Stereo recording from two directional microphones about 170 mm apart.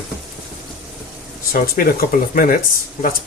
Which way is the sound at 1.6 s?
60° left (ahead or behind).